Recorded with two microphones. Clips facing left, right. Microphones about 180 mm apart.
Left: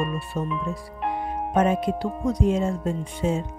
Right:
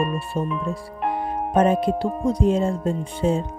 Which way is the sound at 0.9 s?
40° right (ahead or behind).